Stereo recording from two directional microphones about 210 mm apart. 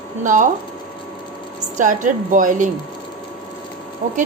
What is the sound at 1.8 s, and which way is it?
Speech, 35° right (ahead or behind).